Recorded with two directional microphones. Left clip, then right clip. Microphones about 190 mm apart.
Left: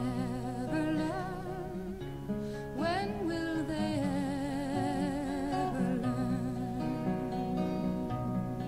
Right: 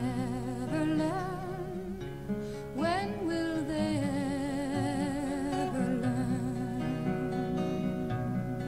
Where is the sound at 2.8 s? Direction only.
15° right (ahead or behind).